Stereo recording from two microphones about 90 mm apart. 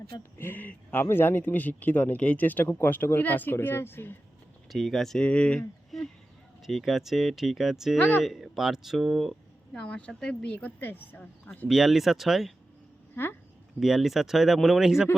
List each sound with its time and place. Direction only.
0.2 s speech: 25° left (ahead or behind)
4.7 s speech: centre (ahead or behind)
5.9 s a sound: centre (ahead or behind)
6.7 s speech: centre (ahead or behind)
7.9 s speech: 20° left (ahead or behind)
8.2 s a woman's voice: centre (ahead or behind); by 11.3 s 20° left (ahead or behind)
11.7 s speech: centre (ahead or behind)
13.7 s speech: 5° right (ahead or behind)